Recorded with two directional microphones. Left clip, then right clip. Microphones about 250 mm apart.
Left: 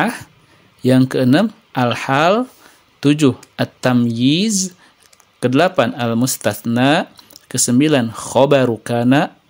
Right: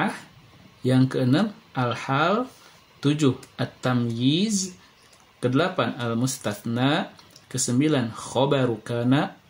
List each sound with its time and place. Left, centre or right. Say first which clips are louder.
0.8 s speech: left 9 dB; left